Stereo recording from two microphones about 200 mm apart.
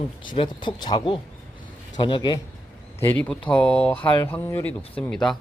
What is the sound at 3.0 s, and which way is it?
Speech, 10° left (ahead or behind).